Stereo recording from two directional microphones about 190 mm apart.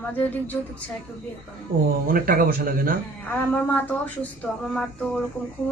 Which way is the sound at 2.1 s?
50° right (ahead or behind).